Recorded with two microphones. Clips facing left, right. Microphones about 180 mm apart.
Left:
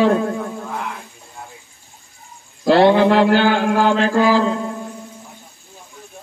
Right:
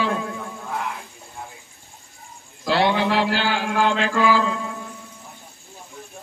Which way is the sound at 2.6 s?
50° left (ahead or behind).